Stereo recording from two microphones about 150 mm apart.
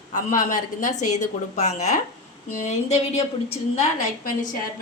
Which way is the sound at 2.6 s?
45° left (ahead or behind).